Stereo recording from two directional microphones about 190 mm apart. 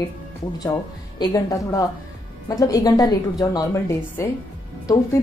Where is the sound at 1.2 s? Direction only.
15° left (ahead or behind).